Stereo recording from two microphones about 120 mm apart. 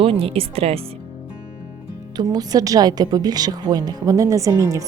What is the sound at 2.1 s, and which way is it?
A woman's voice, 35° right (ahead or behind).